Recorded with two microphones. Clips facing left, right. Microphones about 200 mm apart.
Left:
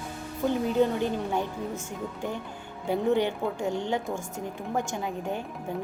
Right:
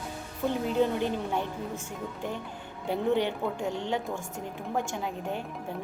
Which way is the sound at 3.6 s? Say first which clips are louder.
Left 3 dB; 45° left (ahead or behind).